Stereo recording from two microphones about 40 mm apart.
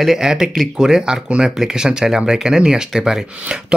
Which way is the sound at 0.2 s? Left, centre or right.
Centre.